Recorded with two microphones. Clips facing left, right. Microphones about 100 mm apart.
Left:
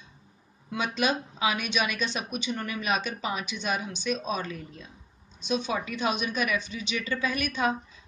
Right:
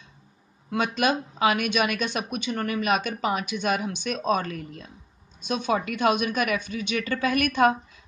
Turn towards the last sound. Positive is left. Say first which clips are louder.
# right 7 dB
turn(degrees=-55)  # may be behind; listen again after turning